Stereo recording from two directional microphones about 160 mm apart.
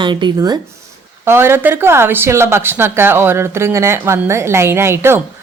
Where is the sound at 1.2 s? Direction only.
15° right (ahead or behind).